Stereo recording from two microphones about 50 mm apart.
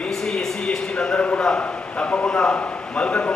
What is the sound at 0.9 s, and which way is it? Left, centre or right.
A man's voice, left.